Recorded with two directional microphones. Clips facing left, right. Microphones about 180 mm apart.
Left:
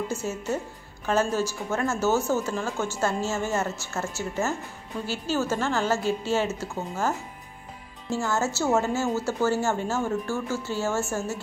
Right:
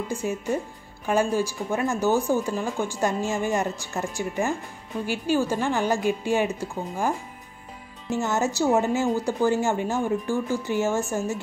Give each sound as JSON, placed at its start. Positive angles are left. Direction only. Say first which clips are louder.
{"t": 0.1, "sound": "speech", "louder": "right 2 dB", "side_deg": -15}